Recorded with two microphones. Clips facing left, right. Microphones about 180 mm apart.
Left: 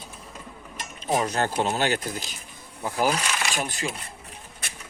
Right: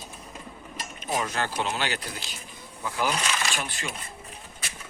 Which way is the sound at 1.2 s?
40° left (ahead or behind).